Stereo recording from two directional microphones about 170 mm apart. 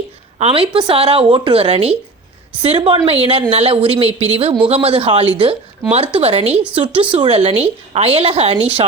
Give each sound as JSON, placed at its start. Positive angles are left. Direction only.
{"t": 0.3, "sound": "speech", "side_deg": -35}